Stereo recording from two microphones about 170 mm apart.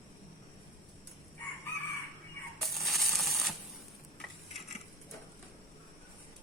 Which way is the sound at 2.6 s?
Centre (ahead or behind).